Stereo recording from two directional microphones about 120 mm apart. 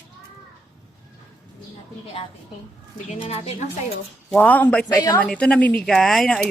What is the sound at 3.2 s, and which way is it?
Speech, 60° left (ahead or behind).